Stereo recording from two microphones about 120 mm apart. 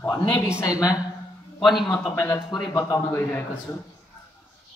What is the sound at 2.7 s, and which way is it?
Speech, 25° left (ahead or behind).